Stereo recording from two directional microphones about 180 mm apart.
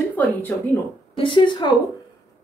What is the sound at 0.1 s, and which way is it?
Speech, 10° left (ahead or behind).